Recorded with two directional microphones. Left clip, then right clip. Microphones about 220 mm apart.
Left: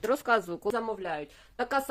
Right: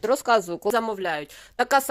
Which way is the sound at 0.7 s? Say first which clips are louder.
Right 7 dB; 45° right (ahead or behind).